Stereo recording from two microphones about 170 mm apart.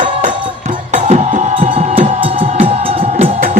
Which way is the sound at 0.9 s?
40° right (ahead or behind).